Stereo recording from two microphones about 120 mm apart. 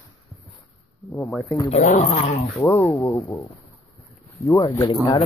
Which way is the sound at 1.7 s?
75° left (ahead or behind).